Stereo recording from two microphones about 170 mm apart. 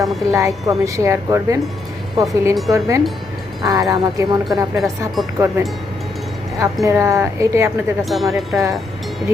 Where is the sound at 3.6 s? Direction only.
20° right (ahead or behind).